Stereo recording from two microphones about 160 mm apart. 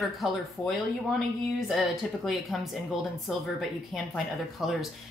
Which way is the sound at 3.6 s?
Centre (ahead or behind).